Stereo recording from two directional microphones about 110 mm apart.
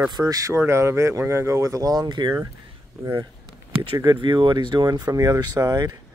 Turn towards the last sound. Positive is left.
turn(degrees=-35)  # may be behind; listen again after turning